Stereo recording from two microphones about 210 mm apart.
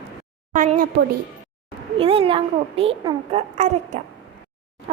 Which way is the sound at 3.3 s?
35° right (ahead or behind).